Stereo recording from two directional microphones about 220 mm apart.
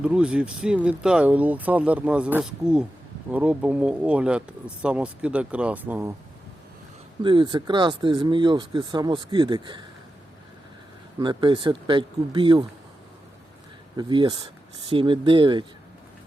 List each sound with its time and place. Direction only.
0.0 s speech: 5° right (ahead or behind)
7.2 s speech: 20° right (ahead or behind)
11.2 s speech: 20° right (ahead or behind)
13.9 s speech: 20° right (ahead or behind)